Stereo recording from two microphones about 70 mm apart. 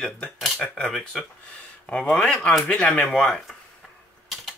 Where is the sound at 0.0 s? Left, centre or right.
Centre.